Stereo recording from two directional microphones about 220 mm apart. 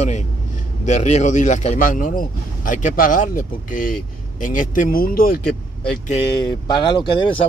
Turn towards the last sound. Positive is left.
turn(degrees=20)  # may be behind; listen again after turning